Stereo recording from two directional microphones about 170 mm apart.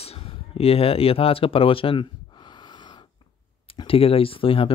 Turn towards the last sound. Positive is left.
turn(degrees=30)  # may be behind; listen again after turning